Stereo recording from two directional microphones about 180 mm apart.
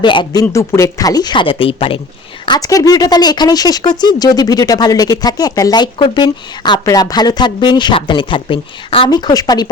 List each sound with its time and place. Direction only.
0.0 s speech: 25° left (ahead or behind)